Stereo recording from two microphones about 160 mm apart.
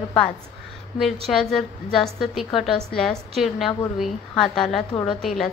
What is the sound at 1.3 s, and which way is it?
A woman's voice, centre (ahead or behind).